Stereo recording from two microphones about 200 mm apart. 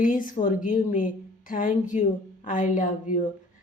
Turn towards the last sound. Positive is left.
turn(degrees=40)  # may be behind; listen again after turning